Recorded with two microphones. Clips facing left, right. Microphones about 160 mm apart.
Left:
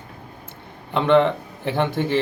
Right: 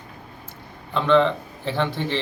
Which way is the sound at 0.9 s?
15° left (ahead or behind).